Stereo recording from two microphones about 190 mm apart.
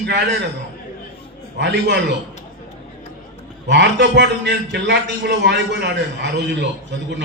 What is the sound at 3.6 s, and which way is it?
A man's voice, 65° right (ahead or behind).